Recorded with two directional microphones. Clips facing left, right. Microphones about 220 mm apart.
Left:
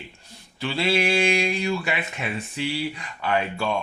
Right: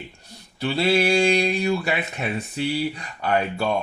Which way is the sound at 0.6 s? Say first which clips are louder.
Right 3 dB; 40° right (ahead or behind).